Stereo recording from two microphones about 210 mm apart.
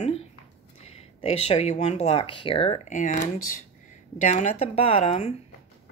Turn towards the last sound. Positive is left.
turn(degrees=30)  # may be behind; listen again after turning